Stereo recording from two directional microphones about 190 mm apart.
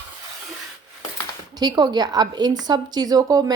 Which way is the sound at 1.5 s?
20° right (ahead or behind).